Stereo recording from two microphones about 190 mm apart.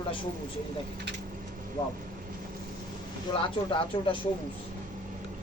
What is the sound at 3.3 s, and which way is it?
Speech, 25° left (ahead or behind).